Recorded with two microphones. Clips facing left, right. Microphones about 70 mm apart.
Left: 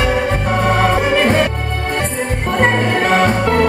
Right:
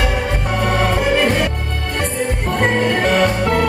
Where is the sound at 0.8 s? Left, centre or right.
Left.